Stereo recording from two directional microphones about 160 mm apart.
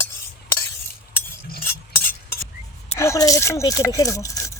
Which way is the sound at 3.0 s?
20° left (ahead or behind).